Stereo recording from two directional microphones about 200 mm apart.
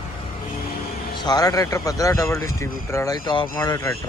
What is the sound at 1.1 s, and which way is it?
Speech, 20° left (ahead or behind).